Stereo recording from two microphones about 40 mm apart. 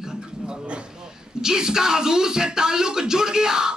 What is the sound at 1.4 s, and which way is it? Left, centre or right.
Beatboxing, centre.